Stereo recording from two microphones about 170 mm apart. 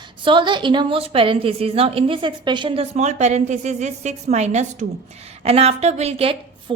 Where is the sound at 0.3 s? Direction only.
30° right (ahead or behind).